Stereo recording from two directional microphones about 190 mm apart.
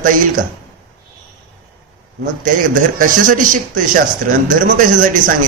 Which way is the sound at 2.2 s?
45° right (ahead or behind).